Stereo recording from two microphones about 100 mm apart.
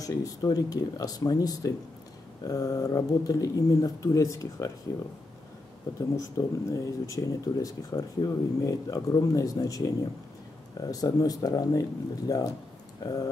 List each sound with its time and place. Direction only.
0.0 s speech: 35° left (ahead or behind)
5.9 s speech: 35° left (ahead or behind)